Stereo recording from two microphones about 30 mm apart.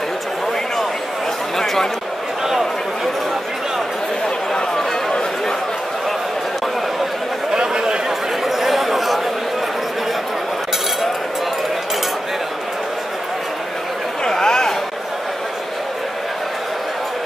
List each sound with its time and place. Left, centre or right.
1.6 s chatter: centre
7.5 s chatter: right
8.5 s chatter: centre
14.3 s a sound: left